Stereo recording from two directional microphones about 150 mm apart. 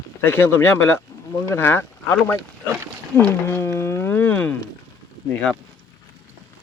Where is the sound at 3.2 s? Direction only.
15° left (ahead or behind).